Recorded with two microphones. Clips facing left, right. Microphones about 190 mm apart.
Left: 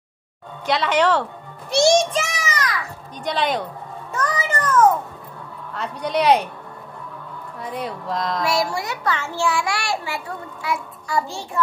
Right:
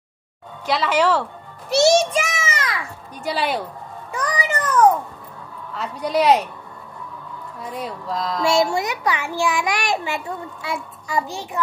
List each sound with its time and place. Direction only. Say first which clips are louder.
0.7 s speech: even; 5° right (ahead or behind)
2.1 s child singing: right 1 dB; 20° right (ahead or behind)
3.3 s speech: left 1 dB; 10° right (ahead or behind)
4.1 s cat: even; 15° right (ahead or behind)
5.8 s speech: right 2 dB; centre (ahead or behind)
7.6 s speech: left 1 dB; centre (ahead or behind)
8.5 s a child's voice: right 8 dB; 25° right (ahead or behind)